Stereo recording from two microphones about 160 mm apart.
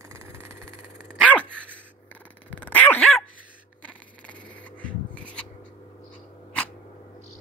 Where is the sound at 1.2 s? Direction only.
10° left (ahead or behind).